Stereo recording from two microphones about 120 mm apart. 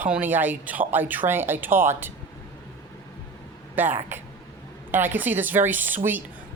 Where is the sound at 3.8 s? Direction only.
15° right (ahead or behind).